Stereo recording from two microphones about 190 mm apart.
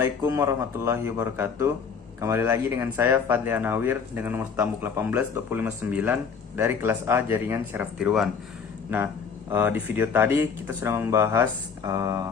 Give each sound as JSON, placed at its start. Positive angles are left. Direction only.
{"t": 0.0, "sound": "speech", "side_deg": -15}
{"t": 9.5, "sound": "speech", "side_deg": -10}